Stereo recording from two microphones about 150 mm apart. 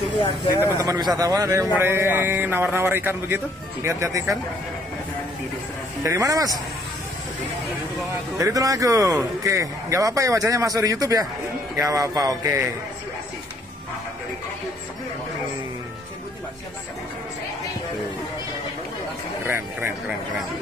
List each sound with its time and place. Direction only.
0.7 s a man's voice: 20° right (ahead or behind)
6.0 s a man's voice: 20° right (ahead or behind)
8.4 s a man's voice: 20° right (ahead or behind)
19.4 s speech: 15° right (ahead or behind)